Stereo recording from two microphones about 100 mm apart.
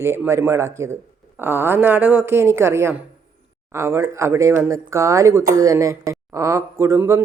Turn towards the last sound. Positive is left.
turn(degrees=-25)  # may be behind; listen again after turning